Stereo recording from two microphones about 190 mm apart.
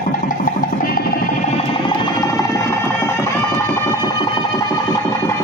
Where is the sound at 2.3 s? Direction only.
15° left (ahead or behind).